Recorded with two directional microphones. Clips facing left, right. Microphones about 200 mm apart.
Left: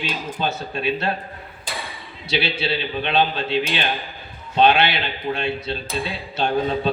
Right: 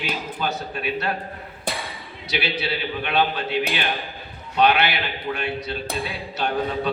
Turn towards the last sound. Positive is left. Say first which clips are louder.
# left 3 dB
turn(degrees=25)  # may be behind; listen again after turning